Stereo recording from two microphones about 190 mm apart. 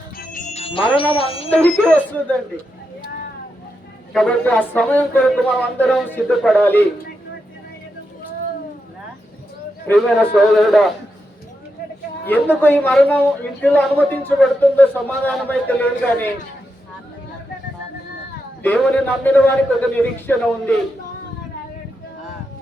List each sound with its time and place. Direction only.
0.5 s speech: 30° left (ahead or behind)
1.5 s speech: 5° left (ahead or behind)
4.1 s speech: centre (ahead or behind)
9.8 s speech: centre (ahead or behind)
12.2 s speech: 10° left (ahead or behind)
18.6 s speech: 5° left (ahead or behind)